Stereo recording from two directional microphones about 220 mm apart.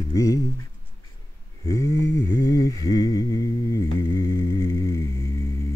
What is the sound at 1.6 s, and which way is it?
Mantra, 15° left (ahead or behind).